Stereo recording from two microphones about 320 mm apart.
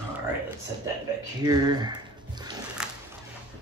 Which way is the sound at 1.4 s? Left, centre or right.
Centre.